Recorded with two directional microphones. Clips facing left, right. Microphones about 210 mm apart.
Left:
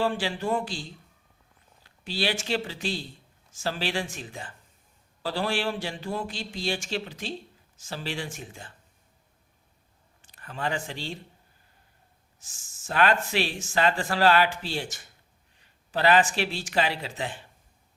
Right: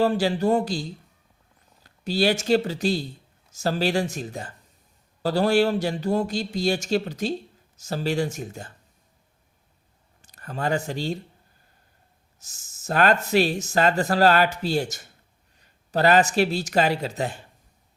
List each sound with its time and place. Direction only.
0.0 s speech: 40° right (ahead or behind)
10.2 s speech: 40° right (ahead or behind)
12.4 s speech: 40° right (ahead or behind)